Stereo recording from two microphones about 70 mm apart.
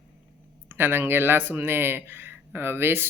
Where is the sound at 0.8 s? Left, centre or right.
Right.